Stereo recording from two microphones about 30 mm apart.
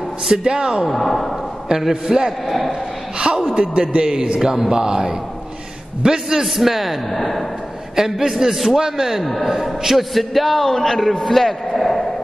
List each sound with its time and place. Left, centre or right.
0.3 s speech: right
0.8 s a man's voice: centre
2.0 s speech: right
2.4 s a man's voice: centre
3.3 s a man's voice: right
4.4 s speech: centre
6.4 s a man's voice: centre
7.1 s a man's voice: centre
7.9 s a man's voice: centre
9.7 s a man's voice: centre